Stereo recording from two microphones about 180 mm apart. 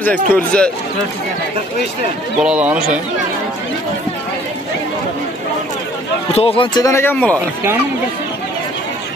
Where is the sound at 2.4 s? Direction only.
5° right (ahead or behind).